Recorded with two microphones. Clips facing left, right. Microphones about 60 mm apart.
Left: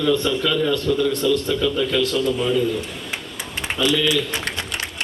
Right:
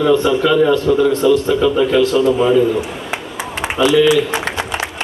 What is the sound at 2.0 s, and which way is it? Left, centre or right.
A man's voice, centre.